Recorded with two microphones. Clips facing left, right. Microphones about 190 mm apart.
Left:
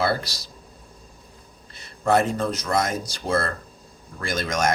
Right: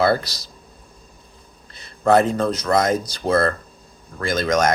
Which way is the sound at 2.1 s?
35° right (ahead or behind).